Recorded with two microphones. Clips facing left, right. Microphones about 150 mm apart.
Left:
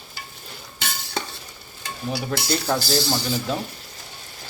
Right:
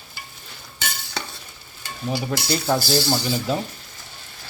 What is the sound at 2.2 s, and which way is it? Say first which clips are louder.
Speech: left 1 dB; centre (ahead or behind).